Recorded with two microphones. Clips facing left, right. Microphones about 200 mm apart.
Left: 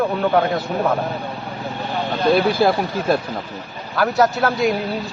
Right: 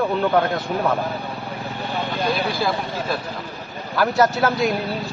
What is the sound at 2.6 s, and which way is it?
Speech, 55° left (ahead or behind).